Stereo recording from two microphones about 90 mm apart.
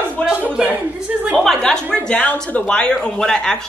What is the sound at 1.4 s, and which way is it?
A woman's voice, 5° left (ahead or behind).